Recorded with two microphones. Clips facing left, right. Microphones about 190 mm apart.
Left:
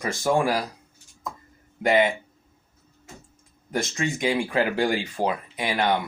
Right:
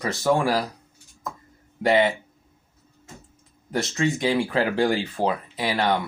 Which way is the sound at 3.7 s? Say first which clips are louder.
Right 3 dB; 20° left (ahead or behind).